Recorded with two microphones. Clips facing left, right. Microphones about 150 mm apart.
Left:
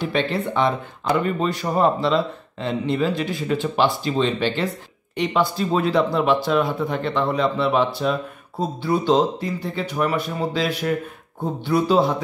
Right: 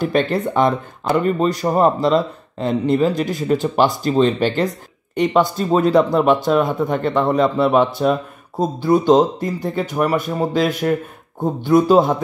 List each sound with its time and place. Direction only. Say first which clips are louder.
0.0 s speech: right 5 dB; 45° right (ahead or behind)